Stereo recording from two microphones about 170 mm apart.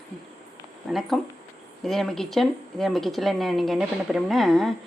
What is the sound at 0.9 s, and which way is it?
A woman's voice, centre (ahead or behind).